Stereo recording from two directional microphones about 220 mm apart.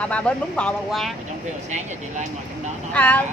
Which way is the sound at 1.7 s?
30° right (ahead or behind).